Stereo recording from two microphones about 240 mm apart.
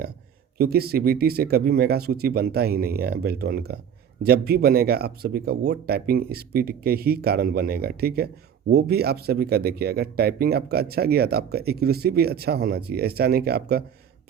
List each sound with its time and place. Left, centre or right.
0.6 s speech: right